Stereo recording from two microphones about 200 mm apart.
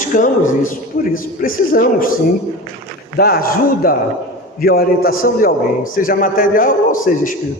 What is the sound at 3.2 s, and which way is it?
A man's voice, 50° left (ahead or behind).